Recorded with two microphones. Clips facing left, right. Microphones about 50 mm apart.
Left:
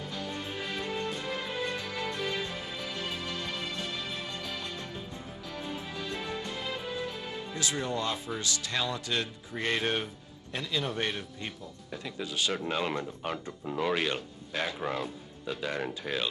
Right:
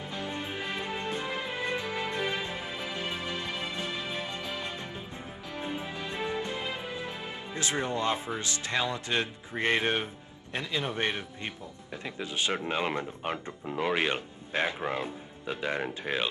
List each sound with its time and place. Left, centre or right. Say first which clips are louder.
0.0 s music: right 1 dB; right
10.5 s speech: right 1 dB; right